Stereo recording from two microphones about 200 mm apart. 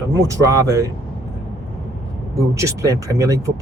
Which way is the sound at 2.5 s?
15° right (ahead or behind).